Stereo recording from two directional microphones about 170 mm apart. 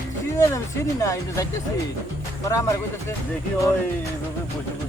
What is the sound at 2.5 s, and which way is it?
Speech, 15° left (ahead or behind).